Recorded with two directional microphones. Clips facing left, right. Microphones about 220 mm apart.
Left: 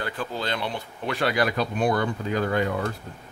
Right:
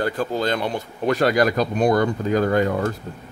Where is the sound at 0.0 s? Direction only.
45° right (ahead or behind).